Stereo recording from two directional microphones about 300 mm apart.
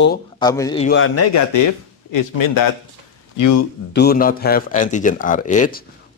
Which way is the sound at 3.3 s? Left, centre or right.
Left.